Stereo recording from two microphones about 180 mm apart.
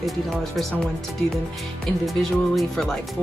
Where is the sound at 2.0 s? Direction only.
Centre (ahead or behind).